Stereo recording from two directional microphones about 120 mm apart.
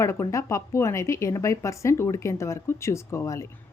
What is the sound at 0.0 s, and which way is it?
Speech, 25° left (ahead or behind).